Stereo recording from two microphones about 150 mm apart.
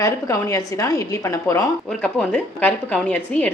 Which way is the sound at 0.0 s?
20° left (ahead or behind).